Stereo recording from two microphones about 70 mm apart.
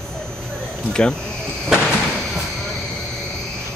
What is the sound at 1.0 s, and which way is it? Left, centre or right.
Speech, centre.